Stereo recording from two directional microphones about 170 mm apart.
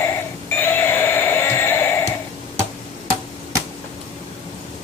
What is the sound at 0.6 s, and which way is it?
Music, 10° left (ahead or behind).